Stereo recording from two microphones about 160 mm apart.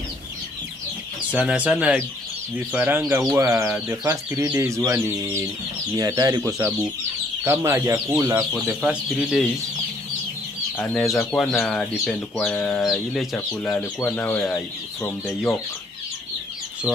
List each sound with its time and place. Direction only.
1.3 s speech: 10° right (ahead or behind)
8.5 s speech: 5° right (ahead or behind)
10.8 s speech: 10° left (ahead or behind)